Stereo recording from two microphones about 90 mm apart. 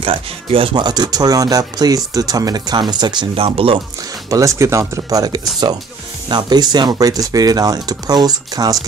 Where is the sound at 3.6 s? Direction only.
90° right.